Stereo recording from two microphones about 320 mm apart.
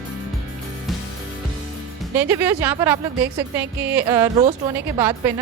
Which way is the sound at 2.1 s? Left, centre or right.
Centre.